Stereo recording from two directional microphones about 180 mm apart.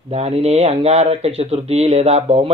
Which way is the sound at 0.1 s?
35° right (ahead or behind).